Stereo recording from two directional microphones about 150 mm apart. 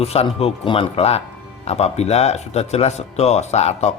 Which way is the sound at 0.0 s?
45° left (ahead or behind).